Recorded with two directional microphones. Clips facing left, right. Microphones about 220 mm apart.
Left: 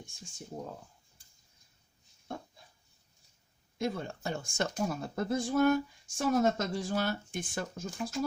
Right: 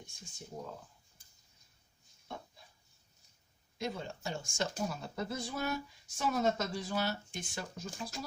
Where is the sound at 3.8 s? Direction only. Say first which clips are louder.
Left 5 dB; 55° left (ahead or behind).